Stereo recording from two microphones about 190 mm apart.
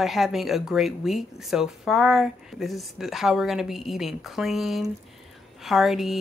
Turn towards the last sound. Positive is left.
turn(degrees=0)  # may be behind; listen again after turning